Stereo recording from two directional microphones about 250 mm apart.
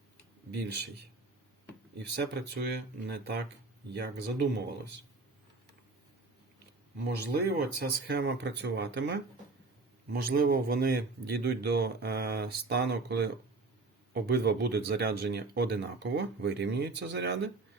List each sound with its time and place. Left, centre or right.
0.5 s speech: right
2.0 s speech: right
7.2 s speech: right